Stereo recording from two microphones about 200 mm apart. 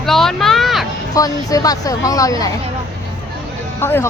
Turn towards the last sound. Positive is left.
turn(degrees=10)  # may be behind; listen again after turning